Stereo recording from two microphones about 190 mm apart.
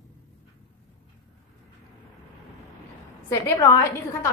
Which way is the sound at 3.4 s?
15° left (ahead or behind).